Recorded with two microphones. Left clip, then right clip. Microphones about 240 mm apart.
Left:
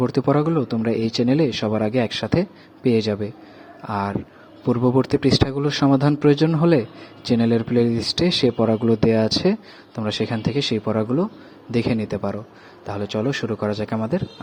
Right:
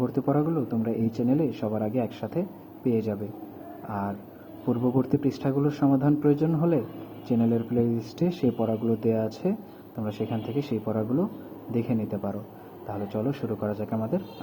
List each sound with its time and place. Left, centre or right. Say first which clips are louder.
0.0 s speech: left 6 dB; left